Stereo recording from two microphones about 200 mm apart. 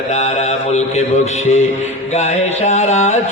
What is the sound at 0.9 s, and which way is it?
Mantra, 35° left (ahead or behind).